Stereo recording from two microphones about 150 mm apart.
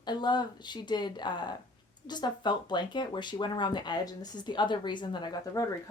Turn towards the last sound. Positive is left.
turn(degrees=25)  # may be behind; listen again after turning